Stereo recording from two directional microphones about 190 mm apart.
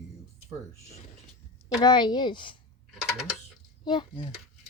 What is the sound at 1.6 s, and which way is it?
Speech, 20° left (ahead or behind).